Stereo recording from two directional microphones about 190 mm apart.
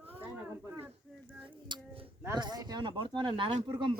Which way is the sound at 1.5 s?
25° right (ahead or behind).